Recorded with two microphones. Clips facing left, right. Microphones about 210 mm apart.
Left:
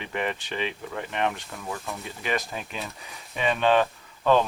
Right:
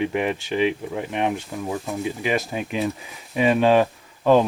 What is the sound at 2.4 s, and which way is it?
Speech, 5° right (ahead or behind).